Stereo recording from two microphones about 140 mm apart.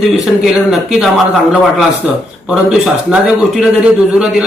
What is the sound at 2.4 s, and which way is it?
A man's voice, 5° right (ahead or behind).